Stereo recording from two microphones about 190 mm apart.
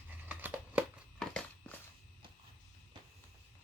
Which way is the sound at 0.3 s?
10° right (ahead or behind).